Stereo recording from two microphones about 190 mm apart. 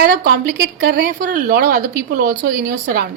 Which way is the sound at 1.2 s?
45° right (ahead or behind).